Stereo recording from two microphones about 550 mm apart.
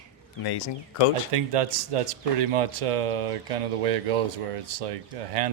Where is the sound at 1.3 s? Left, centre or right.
Right.